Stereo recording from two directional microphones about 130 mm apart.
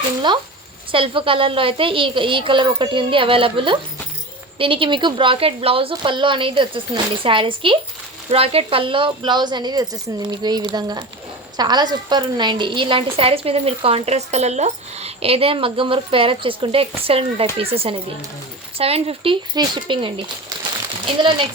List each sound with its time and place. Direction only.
0.9 s a woman's voice: 40° right (ahead or behind)